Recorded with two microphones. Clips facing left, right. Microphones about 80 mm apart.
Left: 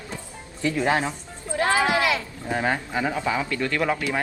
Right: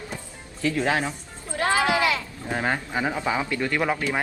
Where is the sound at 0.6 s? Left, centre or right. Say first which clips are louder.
Left 1 dB; left.